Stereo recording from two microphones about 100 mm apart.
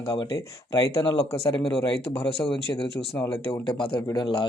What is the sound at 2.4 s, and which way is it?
Speech, 60° left (ahead or behind).